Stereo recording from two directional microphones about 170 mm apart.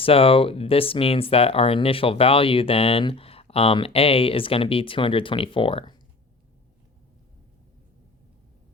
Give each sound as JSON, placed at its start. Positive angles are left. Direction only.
{"t": 0.0, "sound": "speech", "side_deg": 35}